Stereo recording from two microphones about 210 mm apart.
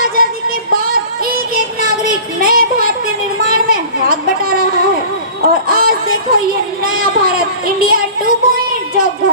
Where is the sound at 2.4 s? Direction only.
45° right (ahead or behind).